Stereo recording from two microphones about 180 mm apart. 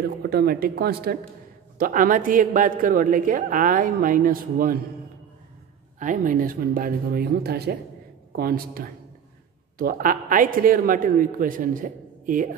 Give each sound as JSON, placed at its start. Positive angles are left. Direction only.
{"t": 0.0, "sound": "speech", "side_deg": -60}
{"t": 1.8, "sound": "a woman's voice", "side_deg": -50}
{"t": 5.9, "sound": "a woman's voice", "side_deg": -45}